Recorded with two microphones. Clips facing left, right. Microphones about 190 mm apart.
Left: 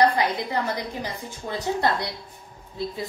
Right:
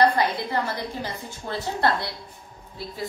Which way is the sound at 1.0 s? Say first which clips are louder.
Even; 15° left (ahead or behind).